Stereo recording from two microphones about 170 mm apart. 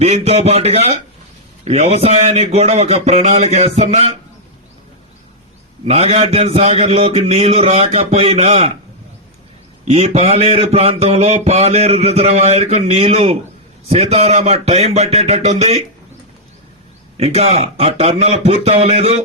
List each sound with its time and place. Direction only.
0.0 s speech: 35° right (ahead or behind)
5.8 s speech: 35° right (ahead or behind)
9.8 s speech: 40° right (ahead or behind)
17.2 s speech: 35° right (ahead or behind)